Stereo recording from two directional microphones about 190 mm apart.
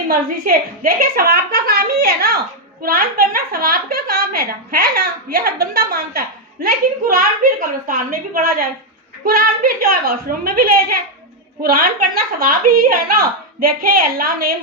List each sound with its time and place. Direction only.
0.1 s a woman's voice: 50° right (ahead or behind)